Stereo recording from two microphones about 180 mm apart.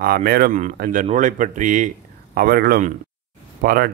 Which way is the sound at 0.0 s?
55° right (ahead or behind).